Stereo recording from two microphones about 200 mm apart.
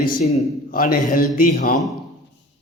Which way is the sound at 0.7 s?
45° left (ahead or behind).